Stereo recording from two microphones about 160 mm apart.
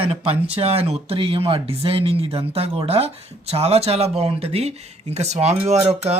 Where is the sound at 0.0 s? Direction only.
35° right (ahead or behind).